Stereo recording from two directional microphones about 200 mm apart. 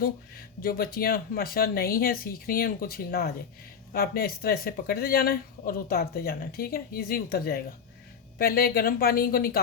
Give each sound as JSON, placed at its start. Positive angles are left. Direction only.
{"t": 0.6, "sound": "speech", "side_deg": 45}